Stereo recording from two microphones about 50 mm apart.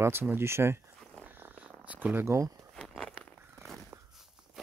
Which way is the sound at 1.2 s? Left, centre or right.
Right.